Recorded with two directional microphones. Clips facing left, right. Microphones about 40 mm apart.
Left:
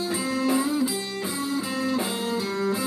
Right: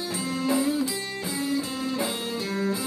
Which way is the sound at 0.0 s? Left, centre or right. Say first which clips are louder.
Left 3 dB; left.